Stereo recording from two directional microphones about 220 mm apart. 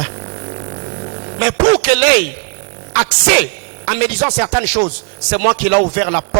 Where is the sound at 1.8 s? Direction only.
10° right (ahead or behind).